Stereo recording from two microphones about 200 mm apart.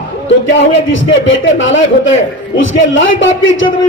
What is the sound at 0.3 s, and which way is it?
A man's voice, 65° left (ahead or behind).